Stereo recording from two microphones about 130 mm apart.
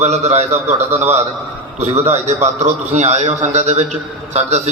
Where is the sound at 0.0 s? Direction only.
60° right (ahead or behind).